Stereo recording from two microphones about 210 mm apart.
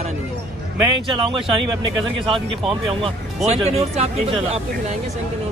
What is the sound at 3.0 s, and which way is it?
Speech, 30° right (ahead or behind).